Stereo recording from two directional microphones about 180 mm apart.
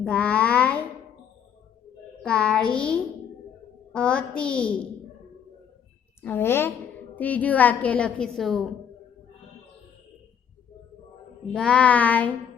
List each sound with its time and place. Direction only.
0.0 s a sound: 5° left (ahead or behind)
2.2 s a child's voice: 5° left (ahead or behind)
6.2 s a woman's voice: 15° left (ahead or behind)
11.5 s a woman's voice: 5° left (ahead or behind)